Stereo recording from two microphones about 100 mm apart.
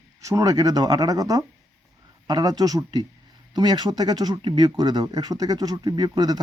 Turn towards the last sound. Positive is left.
turn(degrees=-40)  # may be behind; listen again after turning